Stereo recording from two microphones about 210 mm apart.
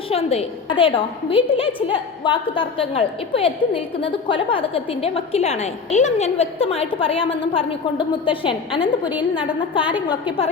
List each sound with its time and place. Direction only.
0.1 s a woman's voice: 30° left (ahead or behind)